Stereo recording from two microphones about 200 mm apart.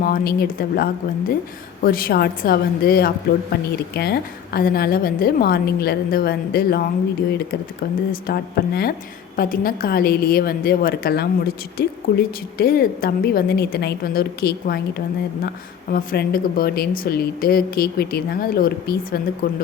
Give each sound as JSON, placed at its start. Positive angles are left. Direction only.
{"t": 0.0, "sound": "speech", "side_deg": 45}
{"t": 8.1, "sound": "speech", "side_deg": 50}